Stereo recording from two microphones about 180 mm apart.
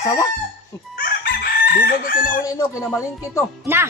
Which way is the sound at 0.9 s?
55° left (ahead or behind).